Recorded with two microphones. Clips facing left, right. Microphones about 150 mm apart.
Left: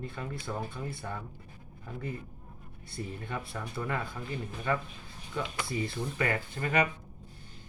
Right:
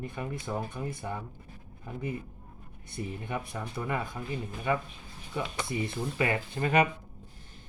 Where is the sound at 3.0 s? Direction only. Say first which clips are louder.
Right 2 dB; 20° right (ahead or behind).